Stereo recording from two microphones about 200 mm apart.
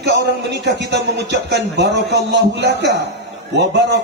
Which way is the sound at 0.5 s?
60° right (ahead or behind).